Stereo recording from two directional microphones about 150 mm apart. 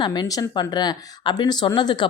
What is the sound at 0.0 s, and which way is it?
Speech, 30° left (ahead or behind).